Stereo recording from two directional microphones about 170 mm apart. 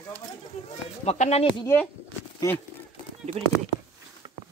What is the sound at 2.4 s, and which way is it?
Speech, 15° left (ahead or behind).